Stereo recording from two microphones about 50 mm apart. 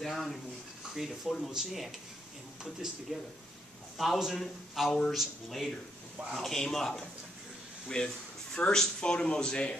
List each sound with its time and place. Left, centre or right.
0.0 s a man's voice: centre
8.0 s speech: centre